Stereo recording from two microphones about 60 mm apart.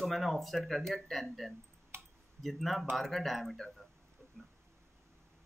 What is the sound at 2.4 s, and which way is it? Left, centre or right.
Speech, centre.